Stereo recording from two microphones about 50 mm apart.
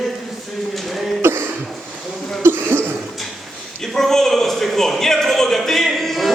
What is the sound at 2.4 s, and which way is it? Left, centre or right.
Cough, right.